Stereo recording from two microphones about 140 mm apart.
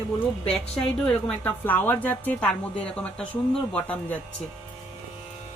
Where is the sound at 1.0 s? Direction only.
15° left (ahead or behind).